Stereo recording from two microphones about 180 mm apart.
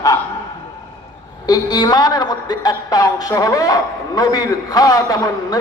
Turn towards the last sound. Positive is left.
turn(degrees=20)  # may be behind; listen again after turning